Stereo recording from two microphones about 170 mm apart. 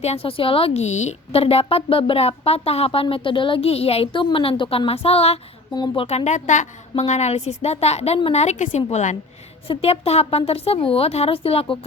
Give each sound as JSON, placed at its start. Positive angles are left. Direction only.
{"t": 0.0, "sound": "a woman's voice", "side_deg": 35}
{"t": 5.7, "sound": "speech", "side_deg": 25}
{"t": 6.1, "sound": "a woman's voice", "side_deg": 40}